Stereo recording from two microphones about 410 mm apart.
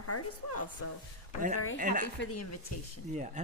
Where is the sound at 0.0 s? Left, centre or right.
Left.